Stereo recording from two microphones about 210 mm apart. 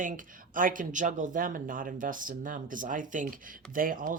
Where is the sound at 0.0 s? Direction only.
40° right (ahead or behind).